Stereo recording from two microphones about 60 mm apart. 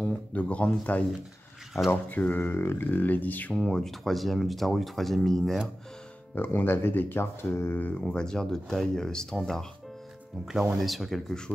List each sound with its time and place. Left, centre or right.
0.0 s speech: left
3.5 s speech: centre
3.8 s speech: centre
6.3 s speech: left
8.0 s speech: centre
10.7 s speech: centre